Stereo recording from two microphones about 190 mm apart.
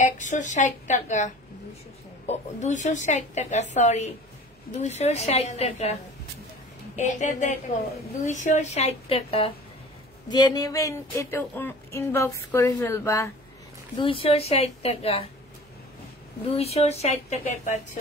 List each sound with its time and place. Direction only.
0.0 s speech: 40° left (ahead or behind)
7.0 s speech: 40° left (ahead or behind); by 13.3 s 15° left (ahead or behind)
13.9 s speech: 30° left (ahead or behind)
16.5 s speech: 35° left (ahead or behind)